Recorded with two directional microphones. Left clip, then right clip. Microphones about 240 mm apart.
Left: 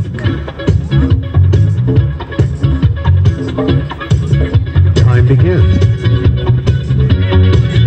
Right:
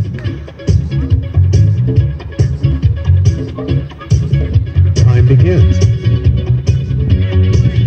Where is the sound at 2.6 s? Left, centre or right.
Left.